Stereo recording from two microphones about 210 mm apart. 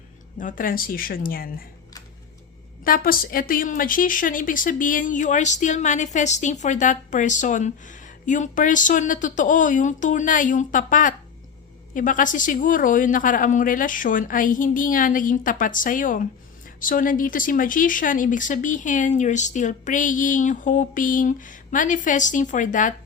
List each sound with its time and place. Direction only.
0.3 s speech: 40° left (ahead or behind)
2.8 s a woman's voice: 45° left (ahead or behind)